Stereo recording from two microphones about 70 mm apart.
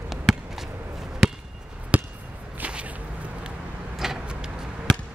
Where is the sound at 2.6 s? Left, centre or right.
Centre.